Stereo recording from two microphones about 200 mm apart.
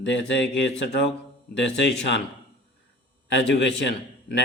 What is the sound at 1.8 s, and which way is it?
Speech, 60° left (ahead or behind).